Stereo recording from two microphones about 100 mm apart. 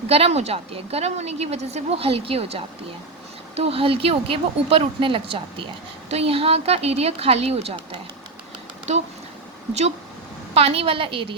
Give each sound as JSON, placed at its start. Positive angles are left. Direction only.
{"t": 0.1, "sound": "a woman's voice", "side_deg": -90}
{"t": 6.1, "sound": "a woman's voice", "side_deg": -80}
{"t": 10.5, "sound": "a woman's voice", "side_deg": -90}